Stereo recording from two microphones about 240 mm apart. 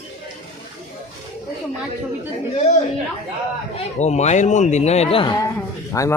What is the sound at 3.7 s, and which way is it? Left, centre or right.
Speech, left.